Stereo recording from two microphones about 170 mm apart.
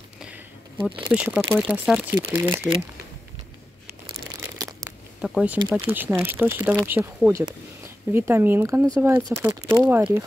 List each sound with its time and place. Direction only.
0.2 s a sound: 10° right (ahead or behind)
1.1 s speech: 10° right (ahead or behind)
2.0 s speech: 10° right (ahead or behind)
4.6 s crumpling: 20° right (ahead or behind)
5.2 s speech: 5° right (ahead or behind)